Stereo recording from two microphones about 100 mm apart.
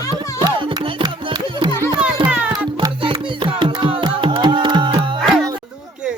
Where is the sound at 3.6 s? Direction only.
55° right (ahead or behind).